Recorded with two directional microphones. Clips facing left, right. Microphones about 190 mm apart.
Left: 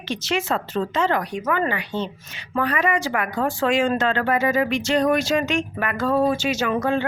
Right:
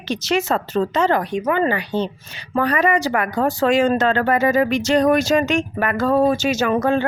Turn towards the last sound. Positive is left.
turn(degrees=-45)  # may be behind; listen again after turning